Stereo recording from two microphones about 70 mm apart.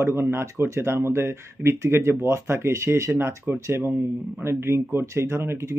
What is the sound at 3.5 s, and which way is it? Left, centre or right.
Speech, right.